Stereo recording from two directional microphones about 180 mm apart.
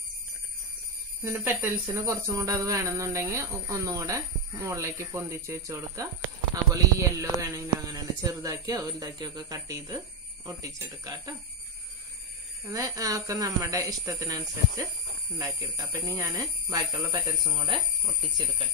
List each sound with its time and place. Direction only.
1.2 s speech: 10° right (ahead or behind)
12.6 s speech: 20° right (ahead or behind)